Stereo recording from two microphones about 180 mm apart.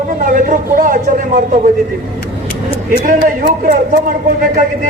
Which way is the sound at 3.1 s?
50° right (ahead or behind).